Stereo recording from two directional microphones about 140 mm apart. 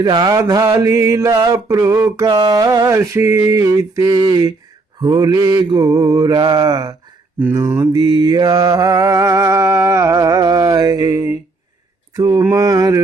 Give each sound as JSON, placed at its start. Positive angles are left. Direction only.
{"t": 0.0, "sound": "mantra", "side_deg": -30}